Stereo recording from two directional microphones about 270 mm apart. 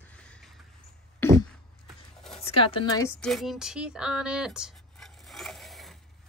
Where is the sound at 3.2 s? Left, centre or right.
Centre.